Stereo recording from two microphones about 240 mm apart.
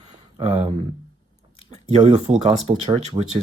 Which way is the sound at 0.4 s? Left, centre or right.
Right.